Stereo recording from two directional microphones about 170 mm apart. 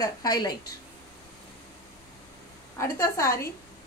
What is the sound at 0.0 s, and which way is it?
Speech, 20° left (ahead or behind).